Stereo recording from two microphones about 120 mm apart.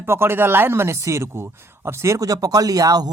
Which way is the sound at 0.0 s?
20° right (ahead or behind).